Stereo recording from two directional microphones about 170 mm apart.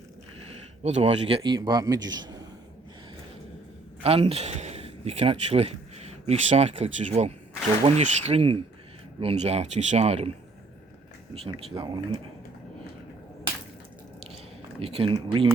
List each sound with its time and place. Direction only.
0.8 s speech: 40° right (ahead or behind)
1.4 s a man's voice: 25° right (ahead or behind)
4.0 s speech: 35° right (ahead or behind)
11.3 s a man's voice: 30° right (ahead or behind)
14.8 s speech: 35° right (ahead or behind)